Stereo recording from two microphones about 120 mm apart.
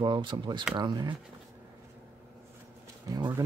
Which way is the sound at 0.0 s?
40° right (ahead or behind).